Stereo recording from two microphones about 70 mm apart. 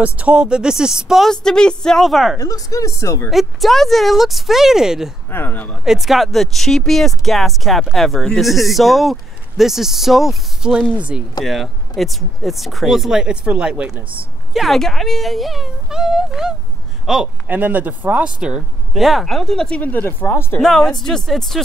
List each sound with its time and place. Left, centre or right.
0.0 s speech: centre
1.2 s a woman's voice: centre
2.3 s speech: left
3.3 s a man's voice: centre
5.3 s speech: left
5.9 s a man's voice: centre
10.9 s speech: centre
11.4 s a man's voice: centre
14.5 s a man's voice: centre
17.5 s speech: right
18.9 s a man's voice: centre
19.8 s speech: left
20.6 s a man's voice: centre